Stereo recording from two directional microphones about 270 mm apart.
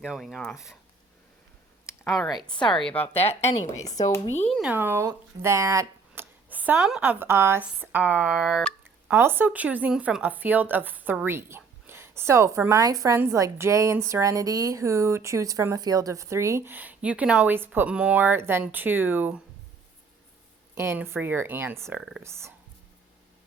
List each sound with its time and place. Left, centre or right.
0.0 s speech: centre
2.0 s speech: centre
2.4 s speech: centre
2.6 s speech: centre
3.1 s speech: left
4.5 s speech: centre
20.7 s speech: centre